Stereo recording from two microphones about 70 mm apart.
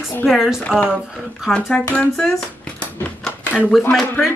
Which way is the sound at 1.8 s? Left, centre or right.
Left.